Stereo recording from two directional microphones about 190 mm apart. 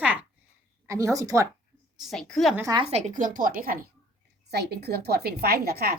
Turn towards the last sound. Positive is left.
turn(degrees=-55)  # may be behind; listen again after turning